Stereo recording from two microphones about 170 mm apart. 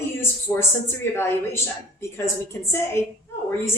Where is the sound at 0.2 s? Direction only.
15° left (ahead or behind).